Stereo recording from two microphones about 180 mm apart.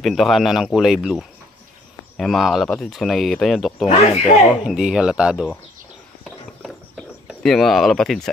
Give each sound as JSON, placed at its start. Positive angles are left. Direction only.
{"t": 0.0, "sound": "speech", "side_deg": 0}
{"t": 3.8, "sound": "speech", "side_deg": 35}
{"t": 4.2, "sound": "speech", "side_deg": 0}
{"t": 7.2, "sound": "speech", "side_deg": 0}